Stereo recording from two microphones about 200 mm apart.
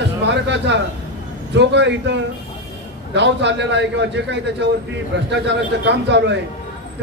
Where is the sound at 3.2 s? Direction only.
60° right (ahead or behind).